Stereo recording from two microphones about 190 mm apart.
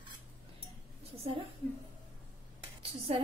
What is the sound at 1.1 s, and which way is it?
Speech, 30° right (ahead or behind).